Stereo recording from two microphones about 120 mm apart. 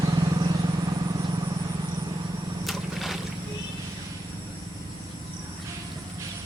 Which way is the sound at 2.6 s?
Centre (ahead or behind).